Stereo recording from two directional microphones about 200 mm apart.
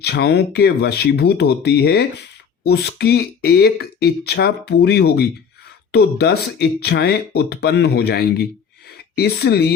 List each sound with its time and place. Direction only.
0.0 s speech: 55° left (ahead or behind)